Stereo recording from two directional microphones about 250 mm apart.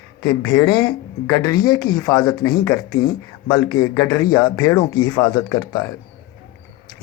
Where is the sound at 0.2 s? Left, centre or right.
Centre.